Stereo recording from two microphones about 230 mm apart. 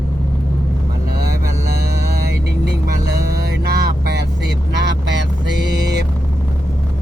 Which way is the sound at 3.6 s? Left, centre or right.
Right.